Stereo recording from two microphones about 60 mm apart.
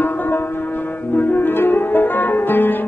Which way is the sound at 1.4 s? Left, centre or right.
Left.